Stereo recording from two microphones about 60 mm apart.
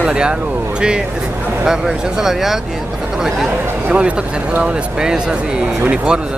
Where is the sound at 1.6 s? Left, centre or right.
Centre.